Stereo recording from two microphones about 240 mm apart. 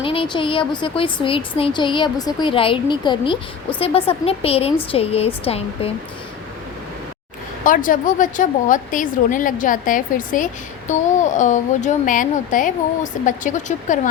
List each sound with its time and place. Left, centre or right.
0.0 s a woman's voice: left
7.6 s a woman's voice: left